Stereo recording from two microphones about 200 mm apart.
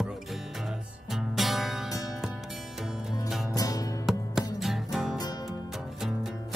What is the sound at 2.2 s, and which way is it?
Music, centre (ahead or behind).